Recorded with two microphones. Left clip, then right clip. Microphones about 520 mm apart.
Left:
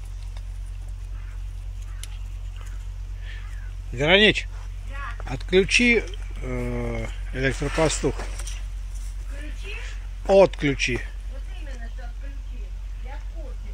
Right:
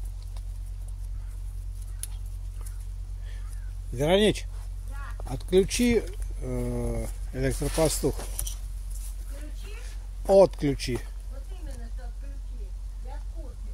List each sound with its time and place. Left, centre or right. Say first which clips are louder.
3.9 s speech: left 6 dB; right
9.8 s speech: left 2 dB; right